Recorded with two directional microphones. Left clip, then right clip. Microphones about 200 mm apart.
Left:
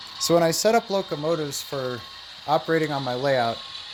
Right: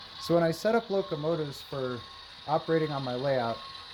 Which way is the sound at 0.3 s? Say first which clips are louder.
Left 6 dB; 35° left (ahead or behind).